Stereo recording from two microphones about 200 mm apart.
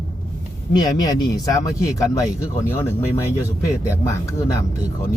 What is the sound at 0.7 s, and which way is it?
Speech, 20° left (ahead or behind).